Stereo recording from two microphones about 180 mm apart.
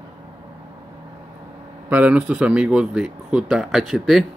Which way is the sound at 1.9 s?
10° right (ahead or behind).